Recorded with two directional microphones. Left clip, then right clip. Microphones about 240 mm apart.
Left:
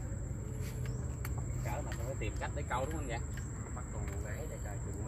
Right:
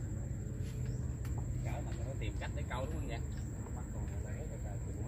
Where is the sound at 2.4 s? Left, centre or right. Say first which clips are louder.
Left 6 dB; left.